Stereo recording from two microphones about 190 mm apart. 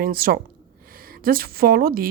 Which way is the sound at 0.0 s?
50° right (ahead or behind).